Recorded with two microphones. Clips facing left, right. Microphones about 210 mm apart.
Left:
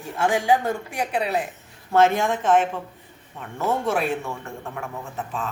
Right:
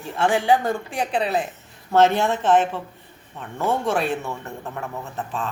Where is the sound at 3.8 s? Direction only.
10° left (ahead or behind).